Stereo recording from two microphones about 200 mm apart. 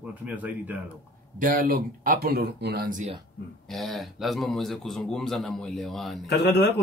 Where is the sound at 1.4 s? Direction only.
45° right (ahead or behind).